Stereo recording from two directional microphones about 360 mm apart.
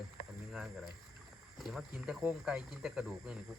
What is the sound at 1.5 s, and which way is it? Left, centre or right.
Speech, centre.